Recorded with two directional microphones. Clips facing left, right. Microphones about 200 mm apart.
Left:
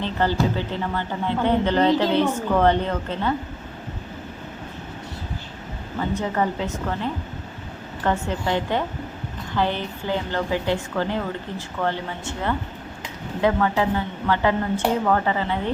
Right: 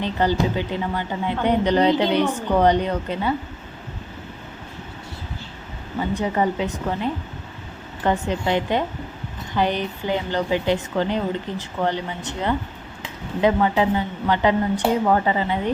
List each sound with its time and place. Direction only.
0.0 s speech: 15° right (ahead or behind)
6.1 s a woman's voice: 15° right (ahead or behind)